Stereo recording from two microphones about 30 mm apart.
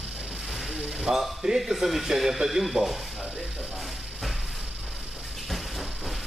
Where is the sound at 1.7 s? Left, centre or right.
Centre.